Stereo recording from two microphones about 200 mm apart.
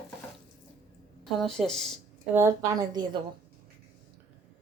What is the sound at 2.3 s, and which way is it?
Speech, 15° right (ahead or behind).